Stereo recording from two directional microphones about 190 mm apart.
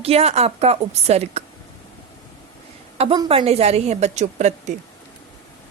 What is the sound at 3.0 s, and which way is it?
A woman's voice, 30° right (ahead or behind).